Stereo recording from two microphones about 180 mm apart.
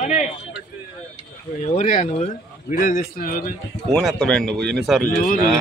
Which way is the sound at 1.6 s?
40° left (ahead or behind).